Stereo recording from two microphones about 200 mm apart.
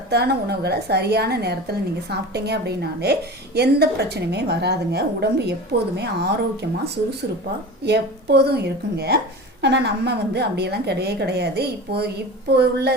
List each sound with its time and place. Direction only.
0.1 s a woman's voice: 55° right (ahead or behind)